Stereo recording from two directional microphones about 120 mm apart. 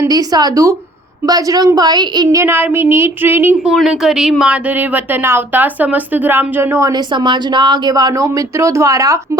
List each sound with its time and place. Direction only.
0.0 s speech: 30° right (ahead or behind)
2.4 s speech: 15° right (ahead or behind)
3.7 s speech: 5° right (ahead or behind)
4.8 s speech: 20° right (ahead or behind)
7.1 s speech: 40° right (ahead or behind)